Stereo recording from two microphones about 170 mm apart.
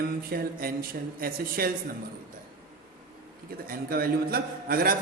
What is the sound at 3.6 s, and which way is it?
Speech, 60° right (ahead or behind).